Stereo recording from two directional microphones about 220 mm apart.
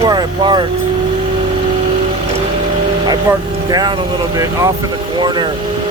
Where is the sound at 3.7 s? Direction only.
20° right (ahead or behind).